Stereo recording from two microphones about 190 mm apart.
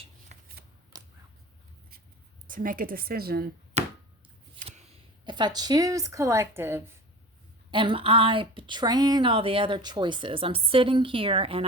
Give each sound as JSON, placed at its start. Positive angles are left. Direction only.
{"t": 0.9, "sound": "a sound", "side_deg": -20}
{"t": 2.5, "sound": "speech", "side_deg": -45}
{"t": 3.8, "sound": "chopping", "side_deg": -35}
{"t": 4.6, "sound": "a sound", "side_deg": -25}
{"t": 5.2, "sound": "speech", "side_deg": -25}
{"t": 7.7, "sound": "a woman's voice", "side_deg": -25}